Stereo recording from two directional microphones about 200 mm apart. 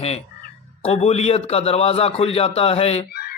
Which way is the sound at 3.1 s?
50° left (ahead or behind).